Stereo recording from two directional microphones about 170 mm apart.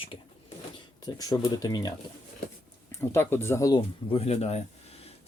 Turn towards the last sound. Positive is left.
turn(degrees=40)  # may be behind; listen again after turning